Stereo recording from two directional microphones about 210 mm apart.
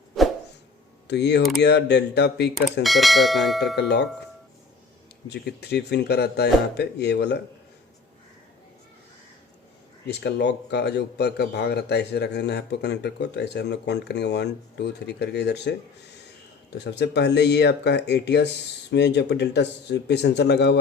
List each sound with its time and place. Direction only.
1.0 s a man's voice: 55° left (ahead or behind)
2.8 s speech: centre (ahead or behind)
3.8 s a man's voice: 55° left (ahead or behind)
5.3 s a man's voice: 50° left (ahead or behind)
10.1 s a man's voice: 55° left (ahead or behind)
16.7 s a man's voice: 55° left (ahead or behind)